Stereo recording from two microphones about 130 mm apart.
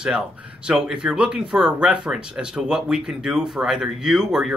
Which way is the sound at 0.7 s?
5° right (ahead or behind).